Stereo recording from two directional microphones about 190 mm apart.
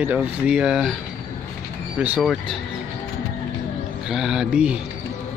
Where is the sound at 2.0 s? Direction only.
5° right (ahead or behind).